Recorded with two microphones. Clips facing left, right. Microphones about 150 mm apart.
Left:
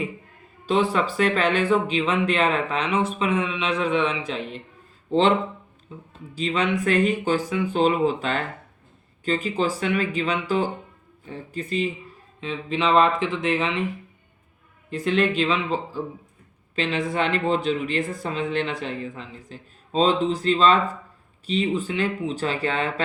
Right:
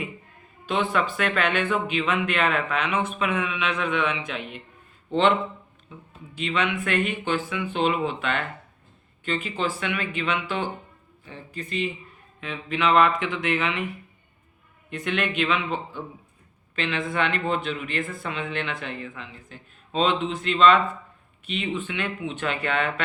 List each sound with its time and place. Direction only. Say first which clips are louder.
0.6 s speech: left 3 dB; 35° left (ahead or behind)
6.3 s speech: left 3 dB; 35° left (ahead or behind)
12.4 s speech: left 1 dB; 30° left (ahead or behind)